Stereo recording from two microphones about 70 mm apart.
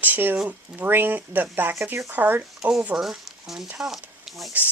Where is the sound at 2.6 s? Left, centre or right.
Centre.